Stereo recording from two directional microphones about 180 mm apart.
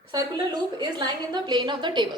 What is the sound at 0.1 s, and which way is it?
A woman's voice, 25° right (ahead or behind).